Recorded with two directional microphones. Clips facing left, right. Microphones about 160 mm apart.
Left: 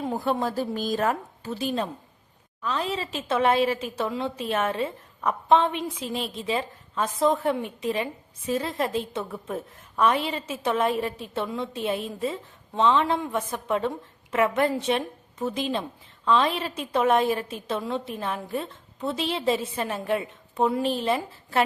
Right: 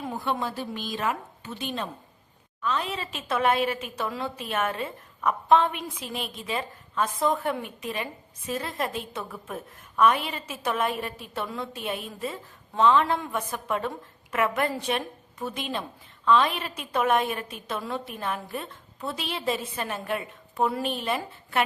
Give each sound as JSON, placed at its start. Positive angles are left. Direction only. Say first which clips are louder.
{"t": 0.0, "sound": "a woman's voice", "louder": "left 4 dB", "side_deg": 40}